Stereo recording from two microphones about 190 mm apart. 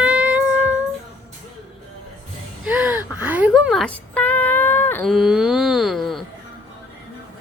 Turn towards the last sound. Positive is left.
turn(degrees=0)  # may be behind; listen again after turning